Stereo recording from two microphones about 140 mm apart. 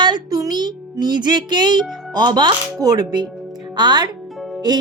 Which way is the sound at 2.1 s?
30° right (ahead or behind).